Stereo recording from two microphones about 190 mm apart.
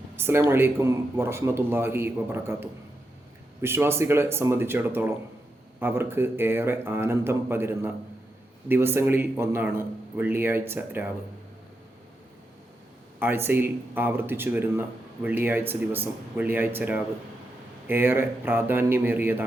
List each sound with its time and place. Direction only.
0.2 s speech: 10° right (ahead or behind)
13.1 s speech: 10° right (ahead or behind)